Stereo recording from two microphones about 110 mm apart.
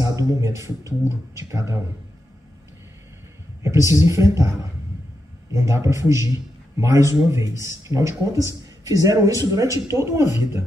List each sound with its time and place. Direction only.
0.0 s a man's voice: 30° right (ahead or behind)
3.6 s a man's voice: 25° right (ahead or behind)